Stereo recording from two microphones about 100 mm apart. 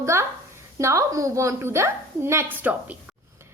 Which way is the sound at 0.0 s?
30° right (ahead or behind).